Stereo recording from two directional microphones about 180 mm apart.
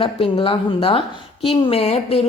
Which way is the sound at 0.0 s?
30° left (ahead or behind).